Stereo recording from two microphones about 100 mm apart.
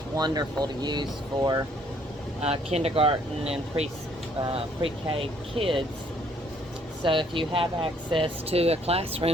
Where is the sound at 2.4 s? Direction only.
90° right; by 3.5 s 65° right (ahead or behind).